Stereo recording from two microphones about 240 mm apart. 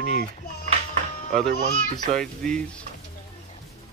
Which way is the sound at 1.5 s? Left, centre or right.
Right.